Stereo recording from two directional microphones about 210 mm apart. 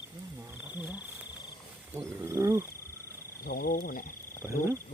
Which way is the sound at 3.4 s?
45° left (ahead or behind).